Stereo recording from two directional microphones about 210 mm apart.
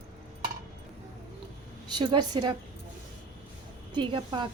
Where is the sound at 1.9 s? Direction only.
20° right (ahead or behind).